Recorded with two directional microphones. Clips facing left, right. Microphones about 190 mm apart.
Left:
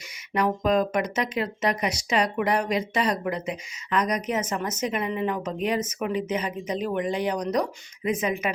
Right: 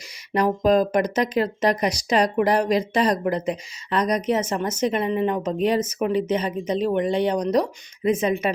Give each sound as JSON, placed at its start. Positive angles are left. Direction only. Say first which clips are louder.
{"t": 0.3, "sound": "speech", "louder": "right 4 dB", "side_deg": -35}